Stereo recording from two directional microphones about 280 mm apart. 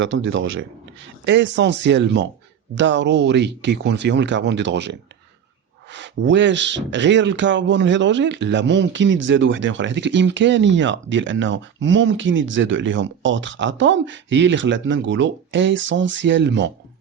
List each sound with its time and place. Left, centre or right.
0.0 s a man's voice: right